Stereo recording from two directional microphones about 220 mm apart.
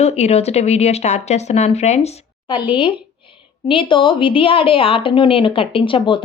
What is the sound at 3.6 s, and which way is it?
Speech, 25° left (ahead or behind).